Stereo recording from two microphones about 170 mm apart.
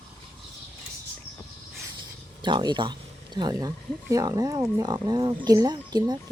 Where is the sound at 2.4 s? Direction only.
25° right (ahead or behind).